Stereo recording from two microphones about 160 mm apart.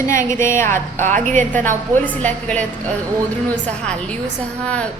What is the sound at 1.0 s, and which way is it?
Speech, 50° right (ahead or behind).